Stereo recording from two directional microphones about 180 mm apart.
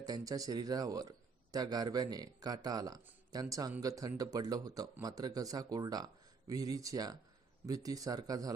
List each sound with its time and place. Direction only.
0.0 s speech: 20° right (ahead or behind)